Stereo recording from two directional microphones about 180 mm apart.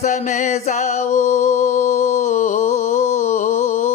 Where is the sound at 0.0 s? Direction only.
40° left (ahead or behind).